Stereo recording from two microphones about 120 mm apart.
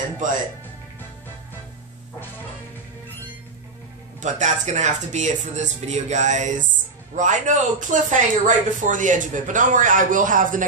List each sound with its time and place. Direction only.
4.2 s speech: 80° right